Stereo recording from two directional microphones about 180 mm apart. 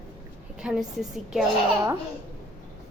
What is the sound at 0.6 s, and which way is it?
Speech, 5° right (ahead or behind).